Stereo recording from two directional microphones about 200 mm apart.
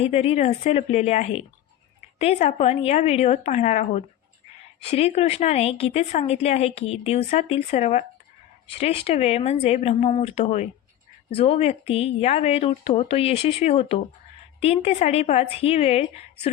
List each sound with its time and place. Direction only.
0.0 s speech: 30° left (ahead or behind)